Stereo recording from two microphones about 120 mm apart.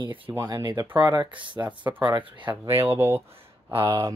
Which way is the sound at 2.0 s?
40° right (ahead or behind).